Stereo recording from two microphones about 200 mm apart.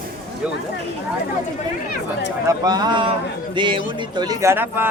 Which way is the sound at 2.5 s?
20° right (ahead or behind).